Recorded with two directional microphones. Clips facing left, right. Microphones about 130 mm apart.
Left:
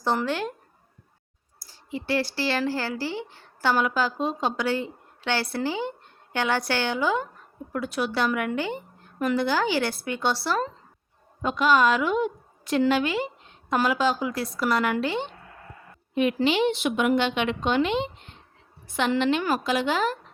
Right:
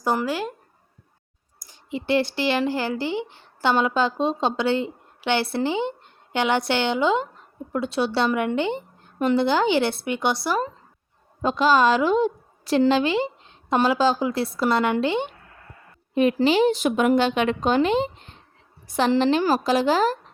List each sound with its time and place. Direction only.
0.0 s speech: 10° right (ahead or behind)
1.5 s a woman's voice: 20° right (ahead or behind)
11.4 s a woman's voice: 30° right (ahead or behind)
16.1 s a woman's voice: 35° right (ahead or behind)